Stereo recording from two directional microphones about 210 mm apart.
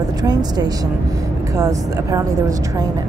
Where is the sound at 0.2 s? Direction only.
20° right (ahead or behind).